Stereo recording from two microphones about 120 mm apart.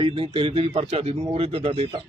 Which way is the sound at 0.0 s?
50° right (ahead or behind).